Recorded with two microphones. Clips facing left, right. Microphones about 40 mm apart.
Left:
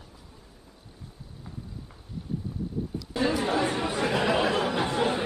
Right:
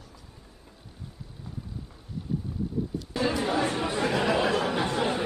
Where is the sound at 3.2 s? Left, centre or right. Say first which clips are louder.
Left 1 dB; centre.